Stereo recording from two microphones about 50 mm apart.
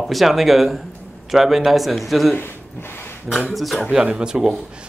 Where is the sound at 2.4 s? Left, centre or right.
Left.